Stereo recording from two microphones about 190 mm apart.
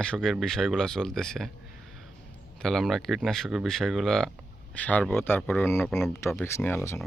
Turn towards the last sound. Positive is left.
turn(degrees=10)  # may be behind; listen again after turning